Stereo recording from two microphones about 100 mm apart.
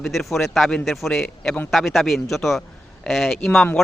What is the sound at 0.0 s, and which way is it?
Speech, centre (ahead or behind).